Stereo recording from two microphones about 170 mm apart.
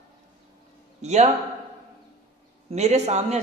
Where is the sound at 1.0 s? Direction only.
40° right (ahead or behind).